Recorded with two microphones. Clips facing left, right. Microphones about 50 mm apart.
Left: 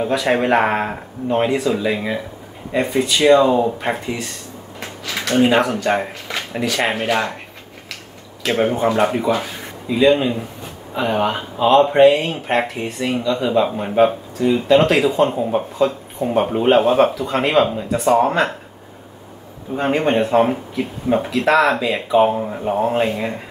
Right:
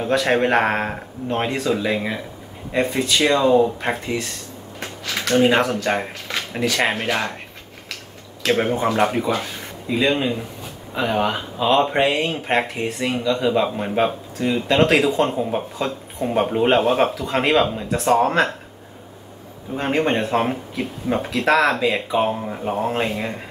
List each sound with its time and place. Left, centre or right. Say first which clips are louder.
0.0 s speech: left 1 dB; centre
5.3 s speech: left 1 dB; centre
8.4 s speech: left 2 dB; centre
19.8 s speech: left 3 dB; centre